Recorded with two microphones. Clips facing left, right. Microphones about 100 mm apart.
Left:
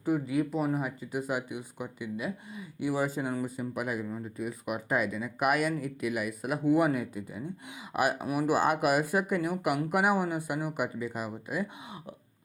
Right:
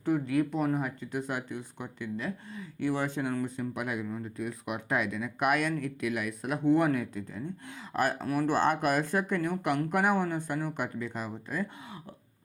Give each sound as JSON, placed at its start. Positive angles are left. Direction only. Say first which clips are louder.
{"t": 0.0, "sound": "speech", "louder": "right 1 dB", "side_deg": 5}